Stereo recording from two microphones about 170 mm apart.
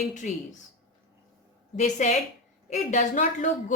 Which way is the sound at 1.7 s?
45° left (ahead or behind).